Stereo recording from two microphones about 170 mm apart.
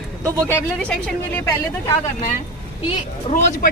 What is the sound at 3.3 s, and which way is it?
Speech, 45° left (ahead or behind).